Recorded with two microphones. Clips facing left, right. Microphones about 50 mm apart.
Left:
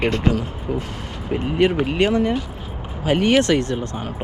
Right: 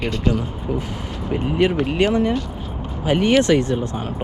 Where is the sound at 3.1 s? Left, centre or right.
Left.